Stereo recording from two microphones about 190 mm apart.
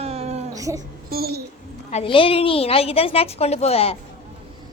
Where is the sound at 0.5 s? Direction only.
15° right (ahead or behind).